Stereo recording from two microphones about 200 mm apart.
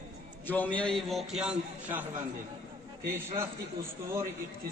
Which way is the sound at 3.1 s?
10° right (ahead or behind).